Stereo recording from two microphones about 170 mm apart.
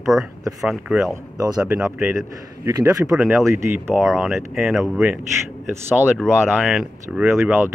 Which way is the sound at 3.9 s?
Centre (ahead or behind).